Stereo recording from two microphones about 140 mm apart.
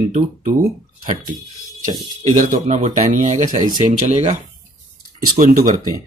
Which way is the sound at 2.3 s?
65° right (ahead or behind).